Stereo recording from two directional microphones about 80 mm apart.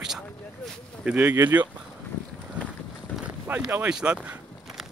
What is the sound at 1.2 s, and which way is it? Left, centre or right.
Speech, right.